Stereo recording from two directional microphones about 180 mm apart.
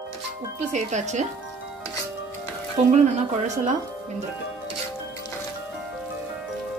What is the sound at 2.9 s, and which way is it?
Speech, 40° right (ahead or behind).